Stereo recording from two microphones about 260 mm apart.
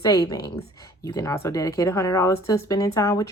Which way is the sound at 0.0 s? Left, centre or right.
Centre.